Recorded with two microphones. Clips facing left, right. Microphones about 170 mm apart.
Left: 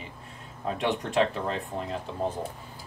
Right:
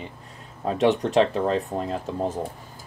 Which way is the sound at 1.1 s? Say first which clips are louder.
Right 6 dB; 35° right (ahead or behind).